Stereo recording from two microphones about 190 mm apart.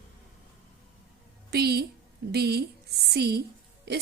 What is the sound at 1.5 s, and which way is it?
A woman's voice, 60° right (ahead or behind).